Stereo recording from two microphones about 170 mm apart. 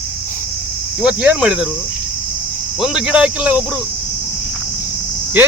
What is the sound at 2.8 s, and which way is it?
Speech, 5° right (ahead or behind).